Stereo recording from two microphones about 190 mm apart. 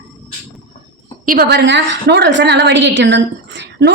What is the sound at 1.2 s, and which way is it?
A woman's voice, 50° right (ahead or behind).